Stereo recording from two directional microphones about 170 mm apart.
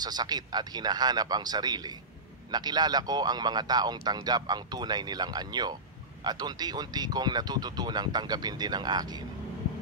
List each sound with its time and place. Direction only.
0.0 s speech: 25° right (ahead or behind)